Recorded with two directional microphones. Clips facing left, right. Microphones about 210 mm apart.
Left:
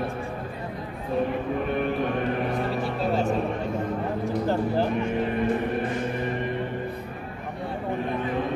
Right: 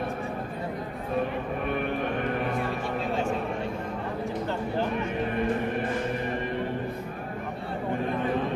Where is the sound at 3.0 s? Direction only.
40° left (ahead or behind).